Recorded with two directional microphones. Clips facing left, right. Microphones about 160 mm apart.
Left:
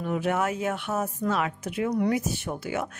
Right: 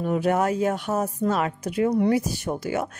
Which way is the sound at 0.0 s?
40° right (ahead or behind).